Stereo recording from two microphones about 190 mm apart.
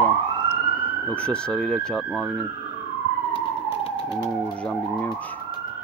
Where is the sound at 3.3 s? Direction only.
30° left (ahead or behind).